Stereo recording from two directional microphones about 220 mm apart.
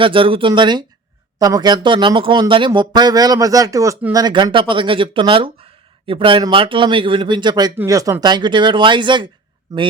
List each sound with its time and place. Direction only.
0.0 s speech: 25° right (ahead or behind)